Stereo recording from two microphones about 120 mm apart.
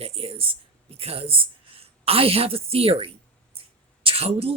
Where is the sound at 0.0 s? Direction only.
50° right (ahead or behind).